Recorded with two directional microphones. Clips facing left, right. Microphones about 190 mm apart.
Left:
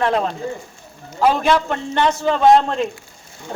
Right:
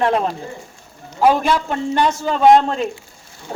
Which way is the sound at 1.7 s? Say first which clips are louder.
Right 1 dB; 10° right (ahead or behind).